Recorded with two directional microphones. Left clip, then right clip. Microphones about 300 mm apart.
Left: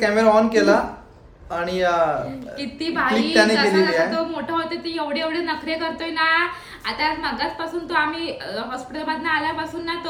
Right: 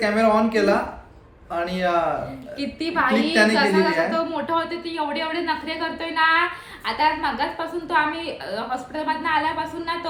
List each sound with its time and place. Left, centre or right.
0.0 s speech: centre
2.6 s a woman's voice: centre